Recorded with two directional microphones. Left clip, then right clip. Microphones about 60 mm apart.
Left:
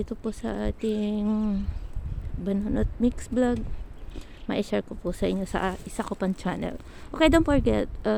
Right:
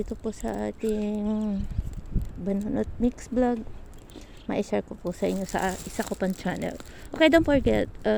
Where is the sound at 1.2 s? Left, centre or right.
Left.